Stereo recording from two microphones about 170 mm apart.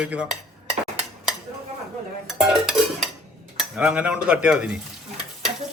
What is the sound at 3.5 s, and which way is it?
A man's voice, 5° right (ahead or behind).